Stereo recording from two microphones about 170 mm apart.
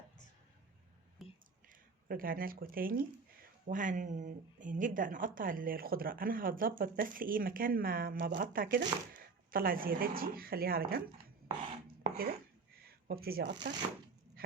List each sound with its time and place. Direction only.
1.2 s whispering: centre (ahead or behind)
2.0 s speech: 55° right (ahead or behind)
12.0 s chopping: 60° right (ahead or behind)
12.8 s speech: 65° right (ahead or behind)